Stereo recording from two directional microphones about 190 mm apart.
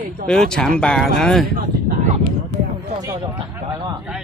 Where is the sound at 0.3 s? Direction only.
5° left (ahead or behind).